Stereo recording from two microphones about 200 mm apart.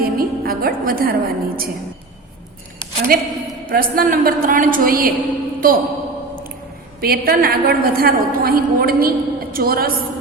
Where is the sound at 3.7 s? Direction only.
45° right (ahead or behind).